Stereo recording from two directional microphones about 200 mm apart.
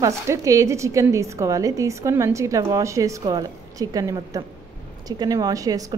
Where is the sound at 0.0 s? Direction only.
15° right (ahead or behind).